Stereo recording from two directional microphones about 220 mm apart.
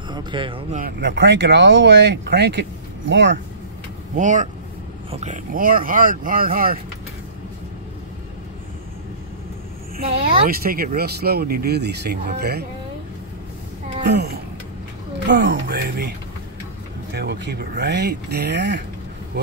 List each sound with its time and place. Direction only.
0.1 s speech: 20° right (ahead or behind)
0.8 s speech: 55° right (ahead or behind)
4.2 s speech: 35° right (ahead or behind)
10.4 s speech: 40° right (ahead or behind)
14.0 s speech: 50° right (ahead or behind)
17.1 s speech: 50° right (ahead or behind)